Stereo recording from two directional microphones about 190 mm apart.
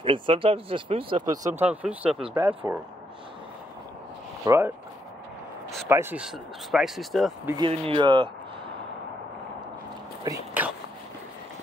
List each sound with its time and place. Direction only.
0.0 s speech: 25° right (ahead or behind); by 2.8 s 10° right (ahead or behind)
4.5 s speech: 10° right (ahead or behind)
5.9 s speech: 10° right (ahead or behind)
7.6 s speech: 30° right (ahead or behind)
10.2 s a sound: 15° right (ahead or behind)